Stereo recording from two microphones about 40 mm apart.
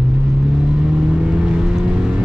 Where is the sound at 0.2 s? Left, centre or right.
Centre.